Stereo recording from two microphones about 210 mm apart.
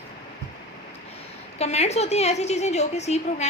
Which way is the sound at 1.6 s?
30° left (ahead or behind).